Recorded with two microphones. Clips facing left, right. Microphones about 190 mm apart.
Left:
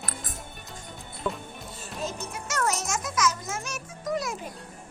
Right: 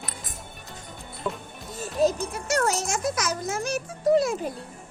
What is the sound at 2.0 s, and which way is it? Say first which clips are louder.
Music: right 11 dB; 35° right (ahead or behind).